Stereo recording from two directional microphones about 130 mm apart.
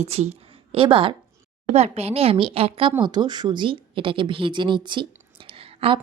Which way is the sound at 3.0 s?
35° right (ahead or behind).